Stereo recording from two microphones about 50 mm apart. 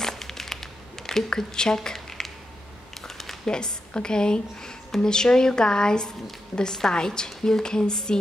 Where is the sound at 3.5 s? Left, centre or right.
Centre.